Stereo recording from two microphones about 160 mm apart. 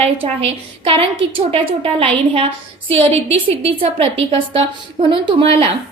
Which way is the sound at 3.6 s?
35° right (ahead or behind).